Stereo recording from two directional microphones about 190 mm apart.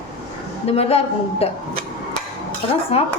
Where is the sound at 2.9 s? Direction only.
30° left (ahead or behind).